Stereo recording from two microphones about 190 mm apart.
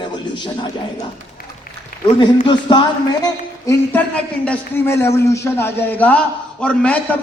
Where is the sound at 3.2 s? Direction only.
15° left (ahead or behind).